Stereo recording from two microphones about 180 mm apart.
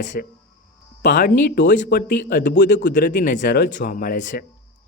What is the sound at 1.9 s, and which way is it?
Speech, 50° left (ahead or behind).